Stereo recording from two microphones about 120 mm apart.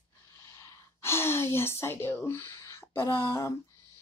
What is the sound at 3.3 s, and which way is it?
Speech, 25° left (ahead or behind).